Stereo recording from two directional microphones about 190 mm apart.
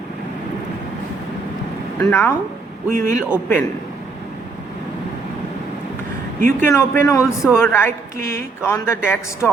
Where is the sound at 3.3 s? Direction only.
10° left (ahead or behind).